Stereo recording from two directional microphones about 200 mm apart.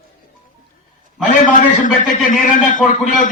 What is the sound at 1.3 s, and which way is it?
A man's voice, 40° left (ahead or behind).